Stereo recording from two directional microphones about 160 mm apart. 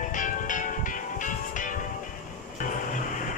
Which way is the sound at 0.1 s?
55° left (ahead or behind).